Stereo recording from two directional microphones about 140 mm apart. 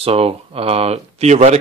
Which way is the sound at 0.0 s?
45° right (ahead or behind).